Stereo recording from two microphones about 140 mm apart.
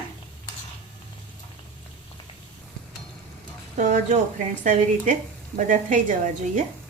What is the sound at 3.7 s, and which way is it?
Speech, 60° right (ahead or behind).